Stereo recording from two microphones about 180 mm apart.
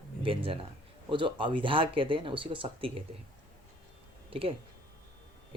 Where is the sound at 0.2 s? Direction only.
30° right (ahead or behind).